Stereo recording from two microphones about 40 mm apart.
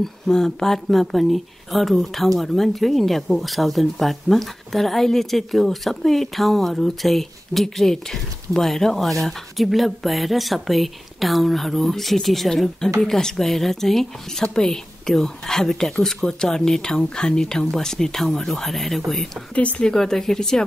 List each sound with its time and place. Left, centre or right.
0.0 s speech: centre
19.5 s speech: left
19.8 s speech: centre